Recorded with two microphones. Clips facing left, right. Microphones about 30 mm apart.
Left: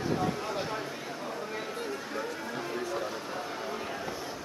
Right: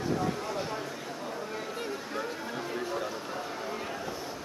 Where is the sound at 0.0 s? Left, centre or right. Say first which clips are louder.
Even; centre.